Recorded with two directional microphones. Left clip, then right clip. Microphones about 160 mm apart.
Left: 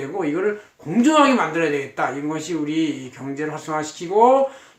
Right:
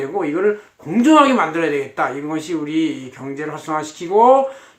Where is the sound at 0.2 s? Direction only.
15° right (ahead or behind).